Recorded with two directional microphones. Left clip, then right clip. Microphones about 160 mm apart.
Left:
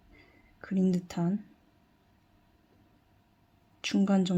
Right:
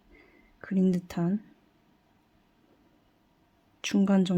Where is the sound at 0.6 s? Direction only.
20° right (ahead or behind).